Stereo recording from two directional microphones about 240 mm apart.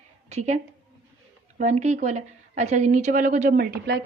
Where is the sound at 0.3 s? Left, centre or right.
Right.